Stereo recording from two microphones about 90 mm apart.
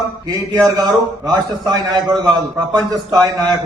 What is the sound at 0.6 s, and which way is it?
A man's voice, 45° right (ahead or behind).